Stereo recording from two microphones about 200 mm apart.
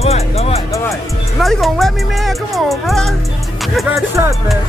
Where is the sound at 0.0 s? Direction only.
30° left (ahead or behind).